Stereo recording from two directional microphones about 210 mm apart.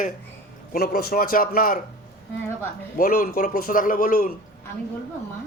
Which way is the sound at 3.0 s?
45° left (ahead or behind).